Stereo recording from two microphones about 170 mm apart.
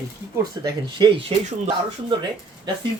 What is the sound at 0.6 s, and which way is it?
Speech, 30° right (ahead or behind).